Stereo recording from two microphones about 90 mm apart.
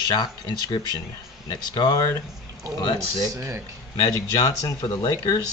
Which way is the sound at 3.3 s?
35° right (ahead or behind).